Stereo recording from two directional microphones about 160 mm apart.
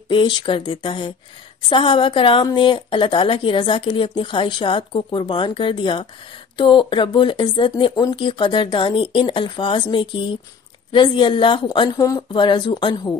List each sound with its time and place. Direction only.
0.1 s a woman's voice: 30° left (ahead or behind)